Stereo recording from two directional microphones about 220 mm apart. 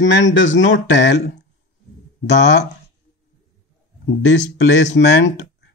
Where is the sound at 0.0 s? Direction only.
55° left (ahead or behind).